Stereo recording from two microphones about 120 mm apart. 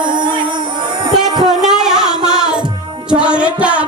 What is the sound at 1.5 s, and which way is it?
Music, 5° right (ahead or behind).